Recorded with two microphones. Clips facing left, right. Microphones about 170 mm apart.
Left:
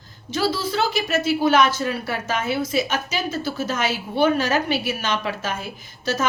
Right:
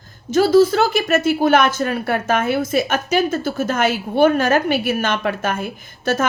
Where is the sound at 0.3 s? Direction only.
45° right (ahead or behind).